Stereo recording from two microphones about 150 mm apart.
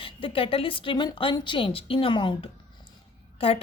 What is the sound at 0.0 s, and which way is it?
A woman's voice, 35° left (ahead or behind).